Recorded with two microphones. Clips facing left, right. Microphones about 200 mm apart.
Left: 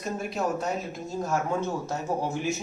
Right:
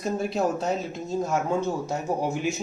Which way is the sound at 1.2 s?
15° right (ahead or behind).